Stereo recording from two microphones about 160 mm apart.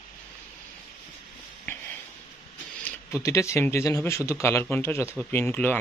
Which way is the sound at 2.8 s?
20° left (ahead or behind).